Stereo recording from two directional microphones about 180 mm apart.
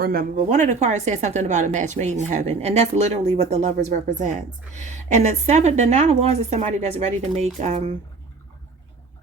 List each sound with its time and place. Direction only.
0.0 s speech: 55° right (ahead or behind); by 7.4 s 40° right (ahead or behind)